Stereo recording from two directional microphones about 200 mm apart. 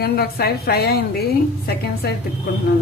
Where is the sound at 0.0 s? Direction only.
50° left (ahead or behind).